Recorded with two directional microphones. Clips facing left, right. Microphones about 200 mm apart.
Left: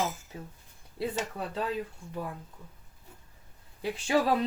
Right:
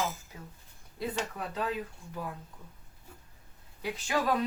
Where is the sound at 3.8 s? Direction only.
30° left (ahead or behind).